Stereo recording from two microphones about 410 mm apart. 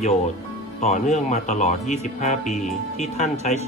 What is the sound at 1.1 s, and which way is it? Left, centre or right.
Speech, centre.